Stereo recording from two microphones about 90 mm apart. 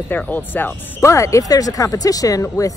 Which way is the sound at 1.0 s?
35° left (ahead or behind).